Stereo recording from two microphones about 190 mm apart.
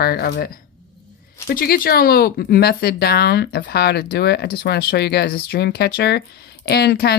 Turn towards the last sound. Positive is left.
turn(degrees=55)  # may be behind; listen again after turning